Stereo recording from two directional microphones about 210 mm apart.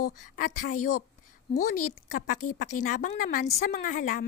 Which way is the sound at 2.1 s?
40° left (ahead or behind).